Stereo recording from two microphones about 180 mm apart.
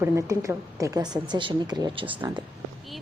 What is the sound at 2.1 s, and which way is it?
Speech, 10° right (ahead or behind).